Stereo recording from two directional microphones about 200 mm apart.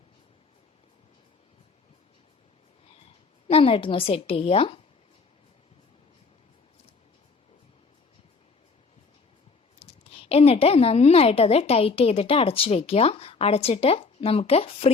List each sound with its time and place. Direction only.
3.5 s a woman's voice: 25° left (ahead or behind)
9.7 s a woman's voice: 30° left (ahead or behind)